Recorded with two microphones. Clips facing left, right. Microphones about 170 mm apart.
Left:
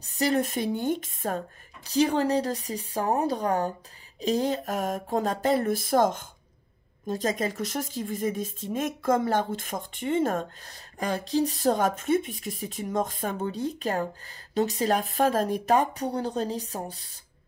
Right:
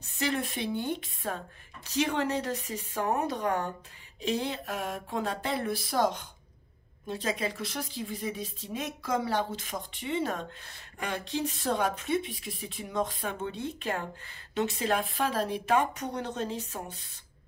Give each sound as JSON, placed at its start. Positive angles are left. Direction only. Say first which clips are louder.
{"t": 0.0, "sound": "a woman's voice", "louder": "left 6 dB", "side_deg": 40}
{"t": 1.9, "sound": "a sound", "louder": "left 6 dB", "side_deg": 35}
{"t": 7.1, "sound": "a woman's voice", "louder": "left 4 dB", "side_deg": 45}